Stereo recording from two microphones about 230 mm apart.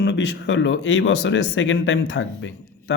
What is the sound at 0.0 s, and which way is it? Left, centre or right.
Speech, left.